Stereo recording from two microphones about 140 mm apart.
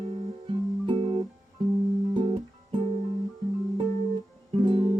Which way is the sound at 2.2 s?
40° right (ahead or behind).